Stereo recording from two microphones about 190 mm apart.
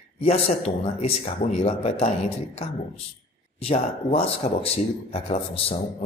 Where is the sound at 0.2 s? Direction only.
30° left (ahead or behind).